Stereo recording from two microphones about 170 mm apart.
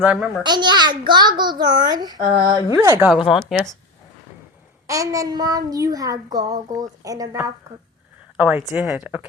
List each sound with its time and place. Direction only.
0.0 s speech: 10° right (ahead or behind)
0.4 s a child's voice: 25° right (ahead or behind)
3.1 s speech: centre (ahead or behind)
4.9 s a child's voice: 20° right (ahead or behind)
8.4 s speech: 10° right (ahead or behind)